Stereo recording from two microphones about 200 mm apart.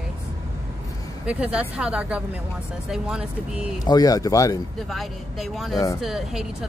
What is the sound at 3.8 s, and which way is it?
Speech, 20° left (ahead or behind).